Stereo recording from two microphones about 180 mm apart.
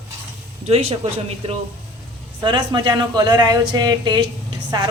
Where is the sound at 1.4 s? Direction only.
35° right (ahead or behind).